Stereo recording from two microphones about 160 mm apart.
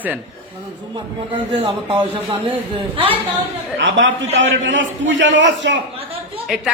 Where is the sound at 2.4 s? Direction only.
35° right (ahead or behind).